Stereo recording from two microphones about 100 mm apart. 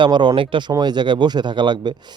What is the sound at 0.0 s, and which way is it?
Speech, 50° right (ahead or behind).